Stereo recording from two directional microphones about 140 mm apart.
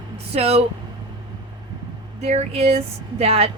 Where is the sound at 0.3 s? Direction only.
45° right (ahead or behind).